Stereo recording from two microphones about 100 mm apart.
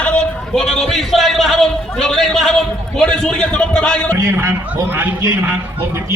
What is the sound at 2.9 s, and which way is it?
A man's voice, 10° left (ahead or behind).